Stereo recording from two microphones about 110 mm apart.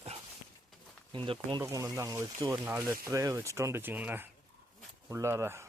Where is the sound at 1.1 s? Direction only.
50° right (ahead or behind).